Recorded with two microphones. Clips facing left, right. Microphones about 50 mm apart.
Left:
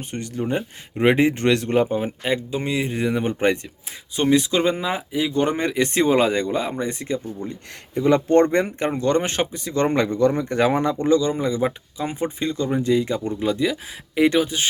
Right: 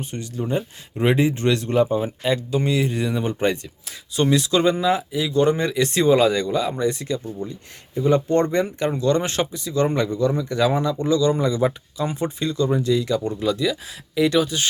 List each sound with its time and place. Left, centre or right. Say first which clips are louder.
0.0 s speech: left 1 dB; left
7.4 s speech: left 1 dB; left
11.2 s speech: right 2 dB; centre